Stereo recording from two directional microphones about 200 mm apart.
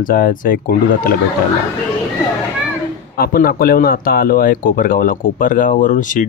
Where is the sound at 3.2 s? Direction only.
50° left (ahead or behind).